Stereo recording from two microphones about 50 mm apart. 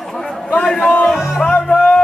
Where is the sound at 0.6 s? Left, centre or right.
Centre.